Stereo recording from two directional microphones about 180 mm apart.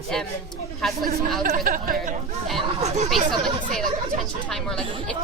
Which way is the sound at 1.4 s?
50° right (ahead or behind).